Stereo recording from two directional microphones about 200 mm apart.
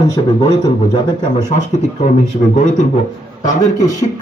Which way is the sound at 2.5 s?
35° left (ahead or behind).